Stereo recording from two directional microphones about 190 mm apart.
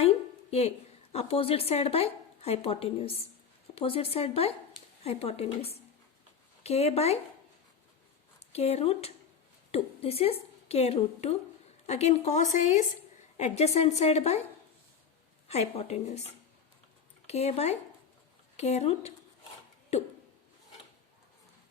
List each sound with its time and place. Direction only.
1.1 s a woman's voice: 30° left (ahead or behind)
8.5 s a woman's voice: 35° left (ahead or behind)
15.4 s a woman's voice: 35° left (ahead or behind)
17.2 s a woman's voice: 35° left (ahead or behind)